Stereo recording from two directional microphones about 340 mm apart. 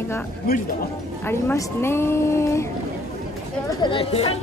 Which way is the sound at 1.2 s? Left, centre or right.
Centre.